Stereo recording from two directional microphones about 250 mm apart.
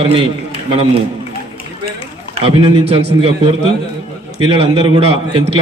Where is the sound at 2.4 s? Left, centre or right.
Right.